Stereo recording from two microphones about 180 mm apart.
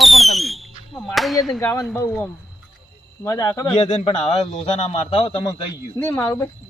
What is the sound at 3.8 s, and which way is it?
Speech, 35° left (ahead or behind).